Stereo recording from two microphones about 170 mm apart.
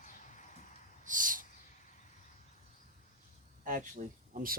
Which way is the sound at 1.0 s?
50° right (ahead or behind).